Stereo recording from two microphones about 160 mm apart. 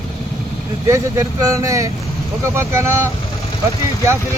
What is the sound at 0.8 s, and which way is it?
Speech, 20° right (ahead or behind).